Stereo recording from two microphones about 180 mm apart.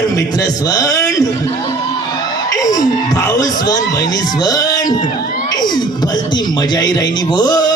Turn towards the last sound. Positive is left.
turn(degrees=20)  # may be behind; listen again after turning